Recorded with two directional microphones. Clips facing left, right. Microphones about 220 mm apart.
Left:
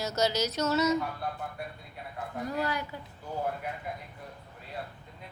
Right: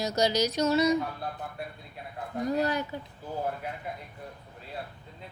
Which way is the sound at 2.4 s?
20° right (ahead or behind).